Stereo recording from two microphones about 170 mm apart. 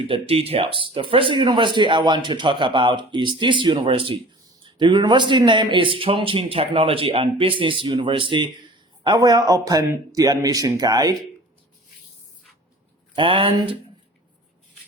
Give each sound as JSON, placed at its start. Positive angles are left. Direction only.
{"t": 0.1, "sound": "speech", "side_deg": -35}
{"t": 13.1, "sound": "speech", "side_deg": -30}